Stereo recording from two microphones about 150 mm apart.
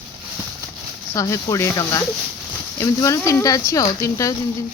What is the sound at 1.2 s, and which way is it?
Speech, 20° left (ahead or behind).